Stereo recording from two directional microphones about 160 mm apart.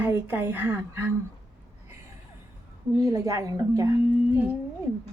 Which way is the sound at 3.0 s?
20° right (ahead or behind).